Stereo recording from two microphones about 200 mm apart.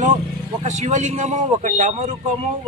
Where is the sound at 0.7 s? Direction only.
35° right (ahead or behind).